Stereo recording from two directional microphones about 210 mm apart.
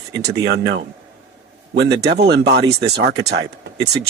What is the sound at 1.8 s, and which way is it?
Speech, 55° right (ahead or behind).